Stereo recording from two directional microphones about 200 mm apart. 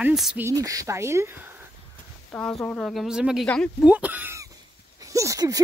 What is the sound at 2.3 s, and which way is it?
Speech, 5° left (ahead or behind).